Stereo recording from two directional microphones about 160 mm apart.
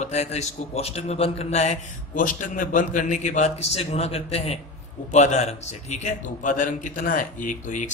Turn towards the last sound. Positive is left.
turn(degrees=50)  # may be behind; listen again after turning